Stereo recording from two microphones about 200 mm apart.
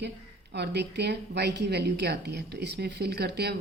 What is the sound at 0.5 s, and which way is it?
A woman's voice, 55° right (ahead or behind).